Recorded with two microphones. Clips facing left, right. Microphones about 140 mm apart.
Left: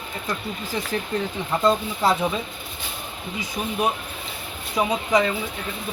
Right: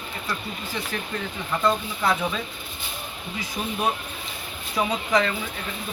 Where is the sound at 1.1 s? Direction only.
25° left (ahead or behind).